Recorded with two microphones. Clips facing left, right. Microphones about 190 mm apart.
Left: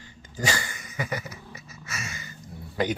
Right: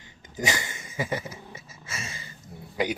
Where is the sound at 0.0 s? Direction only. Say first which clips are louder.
Even; 20° right (ahead or behind).